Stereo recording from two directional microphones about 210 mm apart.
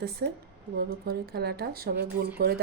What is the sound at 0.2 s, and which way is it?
Speech, 50° right (ahead or behind).